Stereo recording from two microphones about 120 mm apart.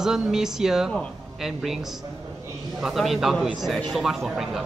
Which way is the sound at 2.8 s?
Centre (ahead or behind).